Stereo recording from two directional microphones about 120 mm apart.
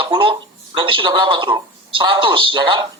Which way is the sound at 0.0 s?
45° right (ahead or behind).